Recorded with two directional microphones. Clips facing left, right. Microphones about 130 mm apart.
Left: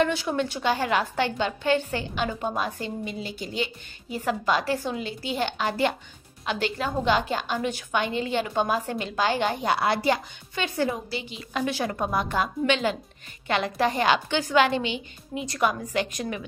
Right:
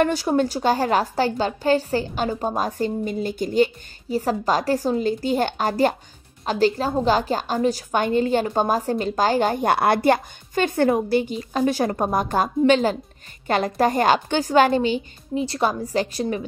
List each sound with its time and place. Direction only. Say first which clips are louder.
0.0 s a woman's voice: right 5 dB; 40° right (ahead or behind)